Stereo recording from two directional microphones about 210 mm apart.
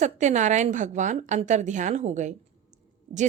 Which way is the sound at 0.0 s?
35° right (ahead or behind).